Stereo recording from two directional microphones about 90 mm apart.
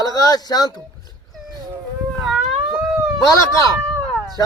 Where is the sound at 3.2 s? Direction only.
40° left (ahead or behind).